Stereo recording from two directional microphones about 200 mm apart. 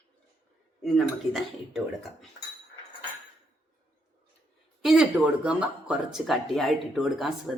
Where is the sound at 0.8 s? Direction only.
Centre (ahead or behind).